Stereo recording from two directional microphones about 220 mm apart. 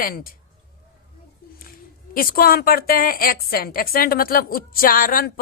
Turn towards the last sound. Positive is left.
turn(degrees=40)  # may be behind; listen again after turning